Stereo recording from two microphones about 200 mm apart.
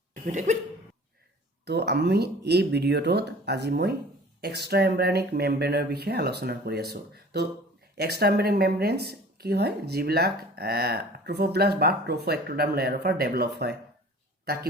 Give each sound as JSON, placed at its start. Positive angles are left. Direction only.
{"t": 0.3, "sound": "speech", "side_deg": -35}
{"t": 1.6, "sound": "speech", "side_deg": -55}